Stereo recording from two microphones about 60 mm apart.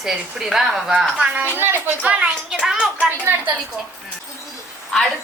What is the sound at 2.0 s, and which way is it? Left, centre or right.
Speech, centre.